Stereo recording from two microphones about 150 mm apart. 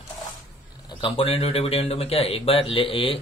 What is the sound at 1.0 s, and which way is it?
Speech, 40° left (ahead or behind).